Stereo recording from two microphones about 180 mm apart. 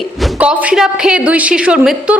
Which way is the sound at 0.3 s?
10° right (ahead or behind).